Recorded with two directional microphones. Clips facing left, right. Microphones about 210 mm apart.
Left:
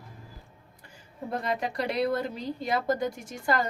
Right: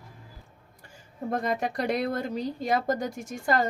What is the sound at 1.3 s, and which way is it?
A woman's voice, 45° right (ahead or behind).